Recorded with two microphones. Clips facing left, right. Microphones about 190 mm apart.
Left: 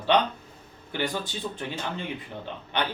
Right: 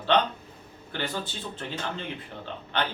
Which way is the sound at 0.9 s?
15° left (ahead or behind).